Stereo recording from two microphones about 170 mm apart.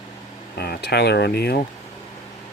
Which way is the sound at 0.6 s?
70° left (ahead or behind).